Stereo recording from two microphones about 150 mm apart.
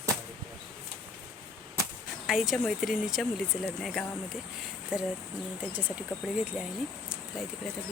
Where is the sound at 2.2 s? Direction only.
Centre (ahead or behind).